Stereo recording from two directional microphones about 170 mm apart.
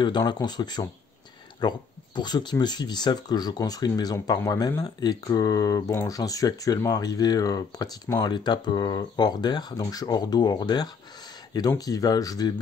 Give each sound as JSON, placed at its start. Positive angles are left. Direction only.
{"t": 0.0, "sound": "speech", "side_deg": 25}